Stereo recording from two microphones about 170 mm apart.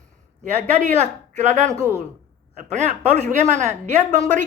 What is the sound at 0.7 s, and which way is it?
Speech, 45° right (ahead or behind).